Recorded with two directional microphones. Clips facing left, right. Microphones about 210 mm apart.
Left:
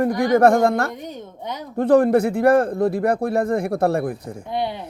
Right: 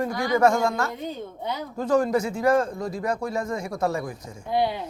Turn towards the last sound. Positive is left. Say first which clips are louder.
# right 1 dB
turn(degrees=20)  # may be behind; listen again after turning